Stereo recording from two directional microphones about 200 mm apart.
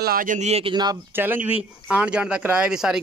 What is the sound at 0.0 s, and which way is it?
Speech, 45° right (ahead or behind).